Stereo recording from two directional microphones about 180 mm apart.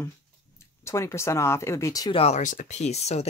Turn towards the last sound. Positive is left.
turn(degrees=35)  # may be behind; listen again after turning